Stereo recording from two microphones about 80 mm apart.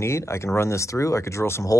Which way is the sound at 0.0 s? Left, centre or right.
Left.